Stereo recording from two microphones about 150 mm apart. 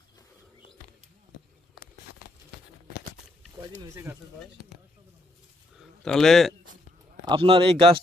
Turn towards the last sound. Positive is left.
turn(degrees=-40)  # may be behind; listen again after turning